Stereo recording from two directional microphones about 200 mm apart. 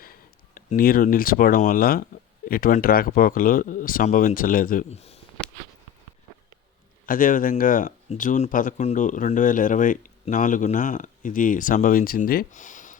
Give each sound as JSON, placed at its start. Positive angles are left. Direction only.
{"t": 0.0, "sound": "speech", "side_deg": 45}
{"t": 7.0, "sound": "speech", "side_deg": 45}